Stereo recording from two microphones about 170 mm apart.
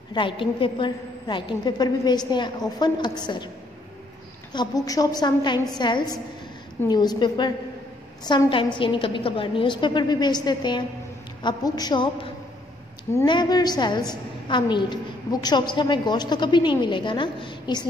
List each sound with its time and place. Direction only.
0.1 s a woman's voice: 30° left (ahead or behind)
4.5 s a woman's voice: 25° left (ahead or behind)